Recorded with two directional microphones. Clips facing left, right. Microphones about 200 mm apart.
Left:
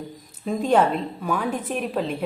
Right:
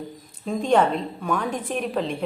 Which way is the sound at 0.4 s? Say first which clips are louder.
Even; 5° left (ahead or behind).